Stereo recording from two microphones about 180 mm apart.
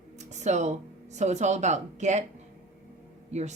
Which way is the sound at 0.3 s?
40° right (ahead or behind).